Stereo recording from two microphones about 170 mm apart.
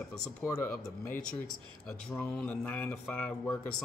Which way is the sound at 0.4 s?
15° left (ahead or behind).